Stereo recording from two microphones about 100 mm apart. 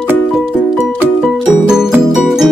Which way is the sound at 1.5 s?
5° right (ahead or behind).